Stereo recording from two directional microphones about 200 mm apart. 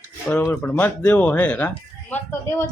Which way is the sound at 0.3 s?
10° left (ahead or behind).